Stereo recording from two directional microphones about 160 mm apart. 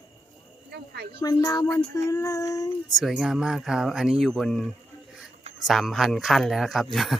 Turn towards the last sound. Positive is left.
turn(degrees=0)  # may be behind; listen again after turning